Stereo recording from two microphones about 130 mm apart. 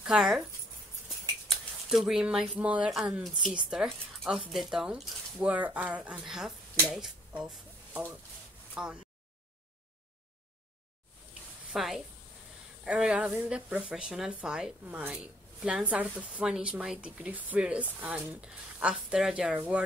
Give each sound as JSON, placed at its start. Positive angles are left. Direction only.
{"t": 0.0, "sound": "speech", "side_deg": -5}
{"t": 1.5, "sound": "speech", "side_deg": 0}
{"t": 11.7, "sound": "a woman's voice", "side_deg": 0}